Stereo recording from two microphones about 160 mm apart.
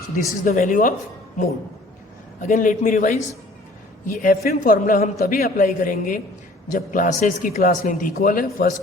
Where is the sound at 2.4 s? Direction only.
55° left (ahead or behind).